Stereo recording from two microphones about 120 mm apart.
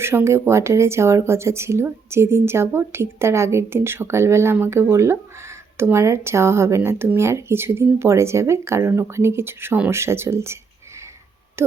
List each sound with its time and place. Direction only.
0.0 s speech: 20° right (ahead or behind)